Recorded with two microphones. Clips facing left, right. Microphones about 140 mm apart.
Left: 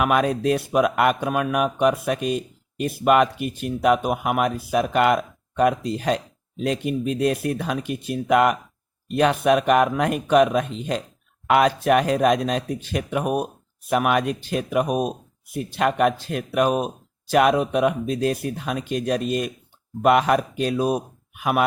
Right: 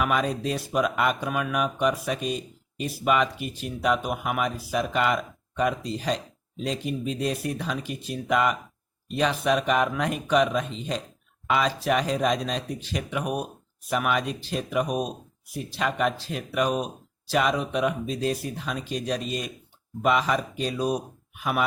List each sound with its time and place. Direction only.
0.0 s speech: 60° left (ahead or behind)